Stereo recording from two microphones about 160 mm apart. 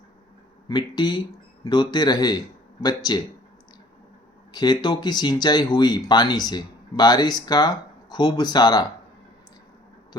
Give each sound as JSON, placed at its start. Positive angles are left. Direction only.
{"t": 0.7, "sound": "speech", "side_deg": 25}
{"t": 4.5, "sound": "speech", "side_deg": 25}